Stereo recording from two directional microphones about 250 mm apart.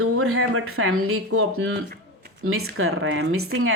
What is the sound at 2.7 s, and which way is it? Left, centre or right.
Speech, right.